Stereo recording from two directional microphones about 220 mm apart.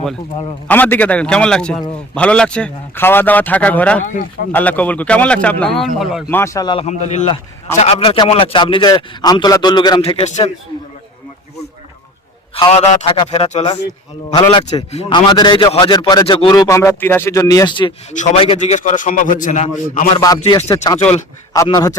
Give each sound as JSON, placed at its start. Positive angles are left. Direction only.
{"t": 0.7, "sound": "a man's voice", "side_deg": 10}
{"t": 4.0, "sound": "a man's voice", "side_deg": 35}
{"t": 4.5, "sound": "speech", "side_deg": 5}
{"t": 6.3, "sound": "a man's voice", "side_deg": 15}
{"t": 6.8, "sound": "a man's voice", "side_deg": 30}
{"t": 12.5, "sound": "a man's voice", "side_deg": 30}
{"t": 20.2, "sound": "a man's voice", "side_deg": 15}